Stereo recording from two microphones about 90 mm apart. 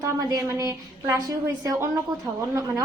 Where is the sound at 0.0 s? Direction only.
35° right (ahead or behind).